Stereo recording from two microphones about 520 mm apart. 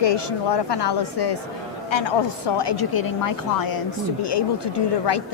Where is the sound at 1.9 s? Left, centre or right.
Left.